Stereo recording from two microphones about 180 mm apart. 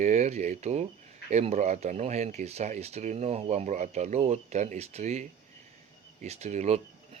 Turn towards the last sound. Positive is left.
turn(degrees=-40)  # may be behind; listen again after turning